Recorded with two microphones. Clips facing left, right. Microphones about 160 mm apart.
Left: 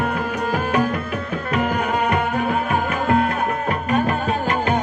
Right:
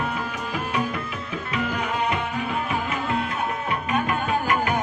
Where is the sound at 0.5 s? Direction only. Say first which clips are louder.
Left 5 dB; 60° left (ahead or behind).